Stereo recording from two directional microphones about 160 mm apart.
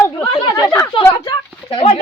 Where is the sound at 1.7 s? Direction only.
30° left (ahead or behind).